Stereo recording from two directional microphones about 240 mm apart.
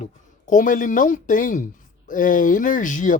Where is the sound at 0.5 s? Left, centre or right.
Left.